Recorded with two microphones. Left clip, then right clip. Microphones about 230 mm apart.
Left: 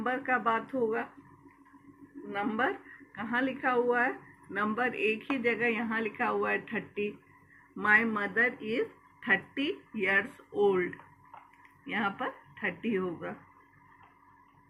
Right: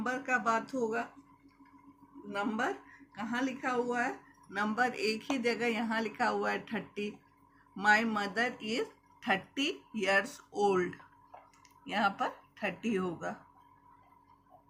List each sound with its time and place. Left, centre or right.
0.0 s speech: right
2.3 s speech: right